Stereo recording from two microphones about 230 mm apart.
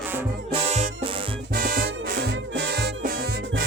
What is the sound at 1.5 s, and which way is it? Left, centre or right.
Music, right.